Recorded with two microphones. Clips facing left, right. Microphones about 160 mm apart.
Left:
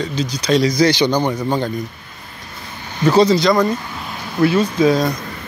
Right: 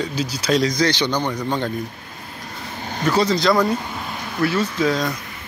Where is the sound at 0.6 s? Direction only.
10° left (ahead or behind).